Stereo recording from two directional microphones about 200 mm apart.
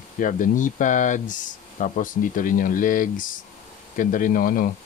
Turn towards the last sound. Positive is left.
turn(degrees=45)  # may be behind; listen again after turning